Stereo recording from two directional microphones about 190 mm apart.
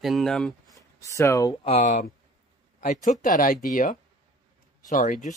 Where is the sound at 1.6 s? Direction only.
30° left (ahead or behind).